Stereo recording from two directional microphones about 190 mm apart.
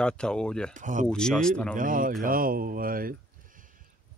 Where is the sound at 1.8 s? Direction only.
45° right (ahead or behind).